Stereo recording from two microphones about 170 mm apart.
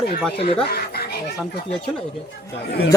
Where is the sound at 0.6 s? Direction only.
70° left (ahead or behind).